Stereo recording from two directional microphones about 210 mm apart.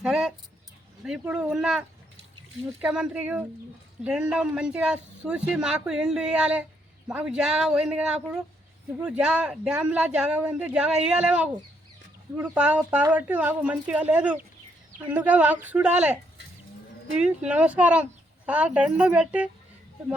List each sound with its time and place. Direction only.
0.0 s a sound: 5° right (ahead or behind)
1.0 s speech: 5° right (ahead or behind)
2.8 s speech: 5° right (ahead or behind)
17.2 s speech: 5° right (ahead or behind)